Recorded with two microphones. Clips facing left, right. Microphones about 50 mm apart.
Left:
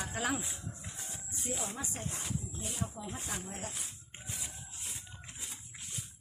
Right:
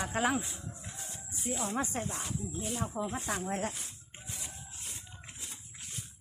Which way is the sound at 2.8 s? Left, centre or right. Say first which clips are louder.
Right 5 dB; right.